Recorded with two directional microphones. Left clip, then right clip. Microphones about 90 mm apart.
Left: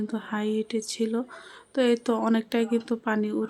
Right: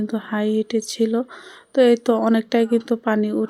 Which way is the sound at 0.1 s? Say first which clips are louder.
Right 8 dB; 30° right (ahead or behind).